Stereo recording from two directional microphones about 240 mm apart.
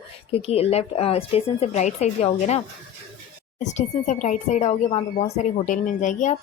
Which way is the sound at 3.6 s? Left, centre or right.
Left.